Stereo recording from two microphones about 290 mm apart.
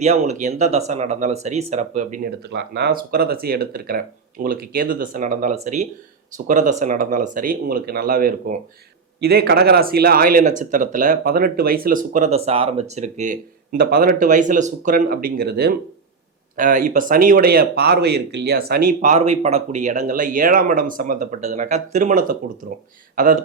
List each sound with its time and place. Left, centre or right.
0.0 s speech: right